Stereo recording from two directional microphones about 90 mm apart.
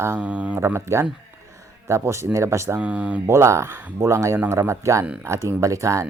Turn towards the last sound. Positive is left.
turn(degrees=-35)  # may be behind; listen again after turning